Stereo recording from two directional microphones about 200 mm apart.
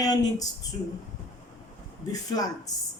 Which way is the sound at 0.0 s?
20° left (ahead or behind).